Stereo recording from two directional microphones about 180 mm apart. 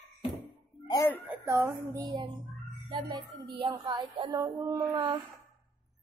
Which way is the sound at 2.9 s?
25° right (ahead or behind).